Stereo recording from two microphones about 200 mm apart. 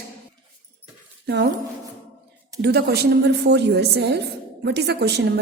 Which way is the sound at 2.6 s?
55° right (ahead or behind).